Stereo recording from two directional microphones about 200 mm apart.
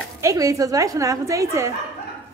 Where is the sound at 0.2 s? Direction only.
15° right (ahead or behind).